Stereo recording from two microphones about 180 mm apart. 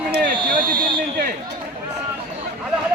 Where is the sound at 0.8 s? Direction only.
55° right (ahead or behind).